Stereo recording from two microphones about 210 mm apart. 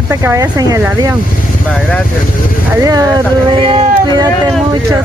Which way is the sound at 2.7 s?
15° right (ahead or behind).